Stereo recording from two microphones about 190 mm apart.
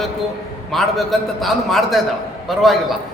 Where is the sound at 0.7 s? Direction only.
Centre (ahead or behind).